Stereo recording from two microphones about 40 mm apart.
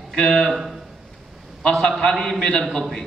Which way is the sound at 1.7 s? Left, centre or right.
Centre.